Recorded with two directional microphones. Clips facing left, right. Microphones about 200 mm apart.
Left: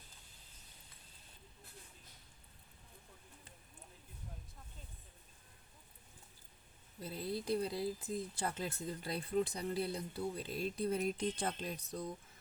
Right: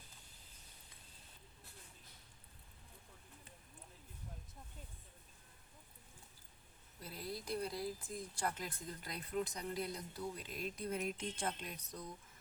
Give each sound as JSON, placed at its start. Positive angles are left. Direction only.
{"t": 7.0, "sound": "speech", "side_deg": 25}